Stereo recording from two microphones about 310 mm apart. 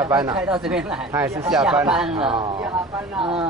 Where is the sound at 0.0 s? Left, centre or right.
Centre.